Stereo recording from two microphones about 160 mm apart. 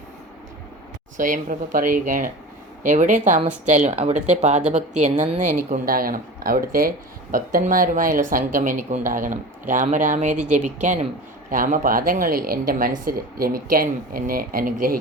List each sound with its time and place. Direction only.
1.1 s speech: 55° right (ahead or behind)